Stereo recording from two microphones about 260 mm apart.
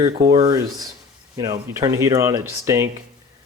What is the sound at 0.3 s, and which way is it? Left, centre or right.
Speech, centre.